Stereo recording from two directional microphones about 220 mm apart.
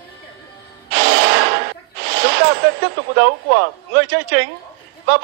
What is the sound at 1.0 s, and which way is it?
Gasp, 50° right (ahead or behind).